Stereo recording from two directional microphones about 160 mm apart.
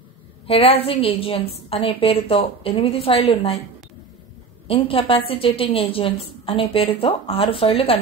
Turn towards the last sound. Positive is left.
turn(degrees=35)  # may be behind; listen again after turning